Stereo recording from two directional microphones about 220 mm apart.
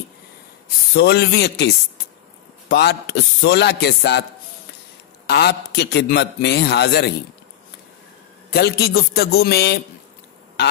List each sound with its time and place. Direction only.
0.9 s a man's voice: 45° left (ahead or behind)
2.7 s a man's voice: 45° left (ahead or behind)
5.3 s a man's voice: 50° left (ahead or behind)
8.5 s a man's voice: 45° left (ahead or behind)